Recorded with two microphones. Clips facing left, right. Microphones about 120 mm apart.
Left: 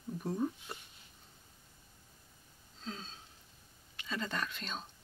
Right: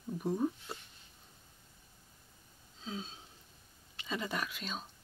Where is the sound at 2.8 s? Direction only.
10° right (ahead or behind).